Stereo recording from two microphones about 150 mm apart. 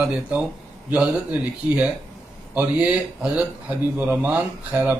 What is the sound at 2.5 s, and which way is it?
A man's voice, 10° right (ahead or behind).